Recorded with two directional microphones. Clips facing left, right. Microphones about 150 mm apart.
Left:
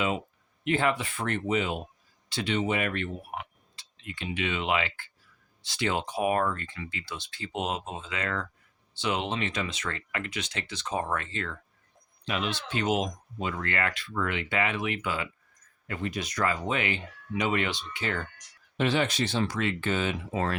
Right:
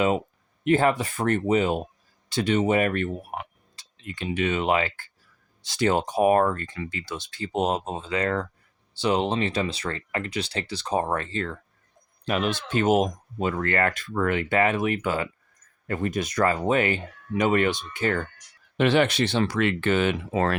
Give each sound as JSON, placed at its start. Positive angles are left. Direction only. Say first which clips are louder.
{"t": 0.6, "sound": "speech", "louder": "right 6 dB", "side_deg": -40}
{"t": 12.2, "sound": "speech", "louder": "right 6 dB", "side_deg": -45}
{"t": 18.8, "sound": "speech", "louder": "right 6 dB", "side_deg": -70}